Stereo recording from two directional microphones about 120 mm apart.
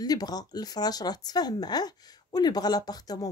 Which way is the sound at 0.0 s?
35° left (ahead or behind).